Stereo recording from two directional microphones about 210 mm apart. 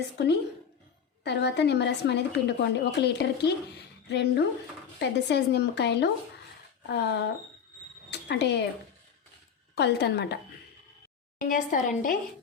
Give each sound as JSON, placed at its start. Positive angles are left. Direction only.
{"t": 1.2, "sound": "a woman's voice", "side_deg": 55}
{"t": 9.7, "sound": "a woman's voice", "side_deg": 55}
{"t": 11.3, "sound": "a woman's voice", "side_deg": 40}